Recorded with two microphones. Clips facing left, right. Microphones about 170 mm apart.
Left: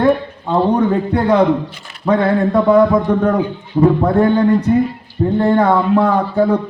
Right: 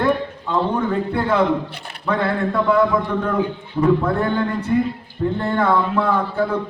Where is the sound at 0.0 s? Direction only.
40° left (ahead or behind).